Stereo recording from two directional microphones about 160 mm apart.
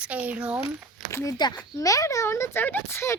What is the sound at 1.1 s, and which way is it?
Speech, 20° left (ahead or behind).